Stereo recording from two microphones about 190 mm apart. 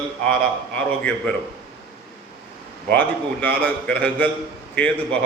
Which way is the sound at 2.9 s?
5° left (ahead or behind).